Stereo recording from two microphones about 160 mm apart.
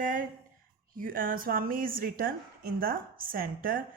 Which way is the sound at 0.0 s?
55° right (ahead or behind).